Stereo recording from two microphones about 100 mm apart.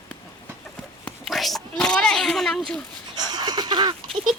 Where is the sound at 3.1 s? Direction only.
45° right (ahead or behind).